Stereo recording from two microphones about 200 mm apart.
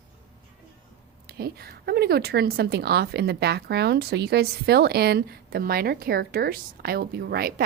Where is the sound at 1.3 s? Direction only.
50° right (ahead or behind).